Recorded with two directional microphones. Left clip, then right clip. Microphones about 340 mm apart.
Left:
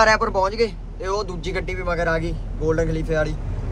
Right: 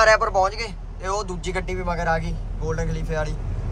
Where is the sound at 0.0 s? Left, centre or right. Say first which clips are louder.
Even; centre.